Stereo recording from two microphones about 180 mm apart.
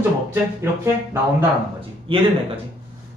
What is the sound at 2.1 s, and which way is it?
Speech, 30° right (ahead or behind).